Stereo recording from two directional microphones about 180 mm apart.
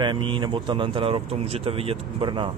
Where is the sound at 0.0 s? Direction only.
25° right (ahead or behind).